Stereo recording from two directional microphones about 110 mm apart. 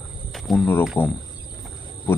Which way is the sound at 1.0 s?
20° left (ahead or behind).